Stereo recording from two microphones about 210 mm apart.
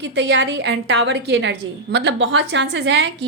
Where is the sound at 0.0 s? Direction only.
55° right (ahead or behind).